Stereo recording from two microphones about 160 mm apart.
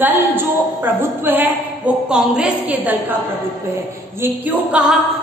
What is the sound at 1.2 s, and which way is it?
A woman's voice, 10° right (ahead or behind).